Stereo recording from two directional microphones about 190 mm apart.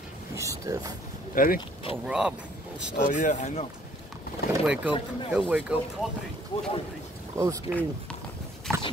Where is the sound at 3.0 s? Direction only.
40° left (ahead or behind).